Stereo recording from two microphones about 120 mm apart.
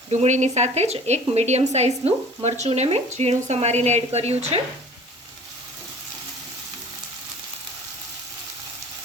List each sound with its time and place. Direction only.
0.1 s speech: 75° right (ahead or behind)